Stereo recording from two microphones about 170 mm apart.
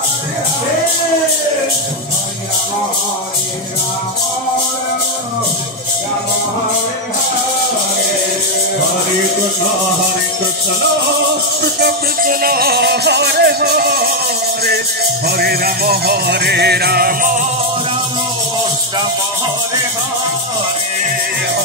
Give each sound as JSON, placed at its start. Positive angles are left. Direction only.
{"t": 11.8, "sound": "music", "side_deg": -60}
{"t": 15.2, "sound": "music", "side_deg": -65}